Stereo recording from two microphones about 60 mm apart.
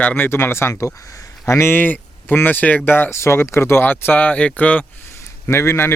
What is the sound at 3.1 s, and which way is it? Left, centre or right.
Speech, left.